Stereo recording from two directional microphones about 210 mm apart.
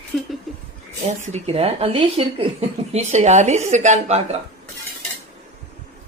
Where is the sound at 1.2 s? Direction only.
30° right (ahead or behind).